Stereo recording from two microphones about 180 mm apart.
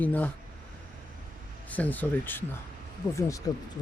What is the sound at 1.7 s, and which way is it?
Speech, 10° left (ahead or behind).